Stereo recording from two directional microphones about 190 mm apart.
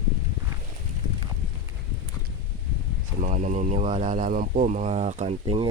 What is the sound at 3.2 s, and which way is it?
Speech, 40° right (ahead or behind).